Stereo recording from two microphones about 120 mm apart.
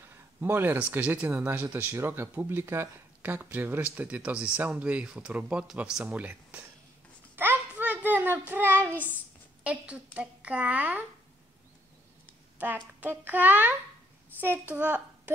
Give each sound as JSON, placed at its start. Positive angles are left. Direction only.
{"t": 0.0, "sound": "speech", "side_deg": -20}
{"t": 7.3, "sound": "a sound", "side_deg": -15}
{"t": 9.6, "sound": "speech", "side_deg": -10}
{"t": 12.5, "sound": "a woman's voice", "side_deg": -15}